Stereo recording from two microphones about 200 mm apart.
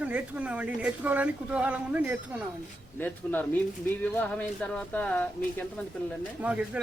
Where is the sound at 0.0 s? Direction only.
5° right (ahead or behind).